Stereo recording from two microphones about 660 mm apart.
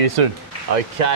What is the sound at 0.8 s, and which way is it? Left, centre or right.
Speech, right.